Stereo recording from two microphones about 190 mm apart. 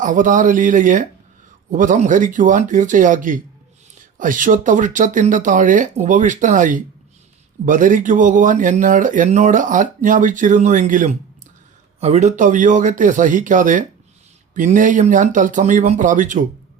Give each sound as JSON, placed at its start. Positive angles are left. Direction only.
{"t": 0.0, "sound": "speech", "side_deg": -45}